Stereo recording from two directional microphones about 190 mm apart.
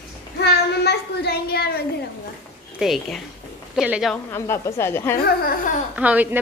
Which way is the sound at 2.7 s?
Centre (ahead or behind).